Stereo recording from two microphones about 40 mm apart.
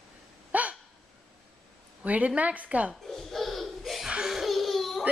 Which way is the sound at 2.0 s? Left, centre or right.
Right.